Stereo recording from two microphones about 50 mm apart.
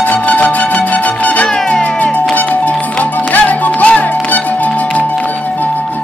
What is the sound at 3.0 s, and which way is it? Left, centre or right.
Music, left.